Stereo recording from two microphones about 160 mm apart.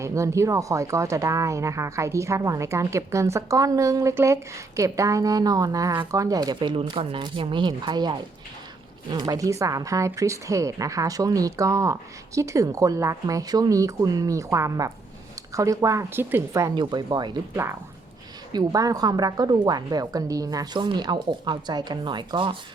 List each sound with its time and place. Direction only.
0.0 s speech: 20° right (ahead or behind)
16.7 s speech: 30° right (ahead or behind)